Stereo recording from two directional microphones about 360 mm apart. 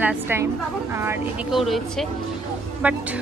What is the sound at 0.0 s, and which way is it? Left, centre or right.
Speech, centre.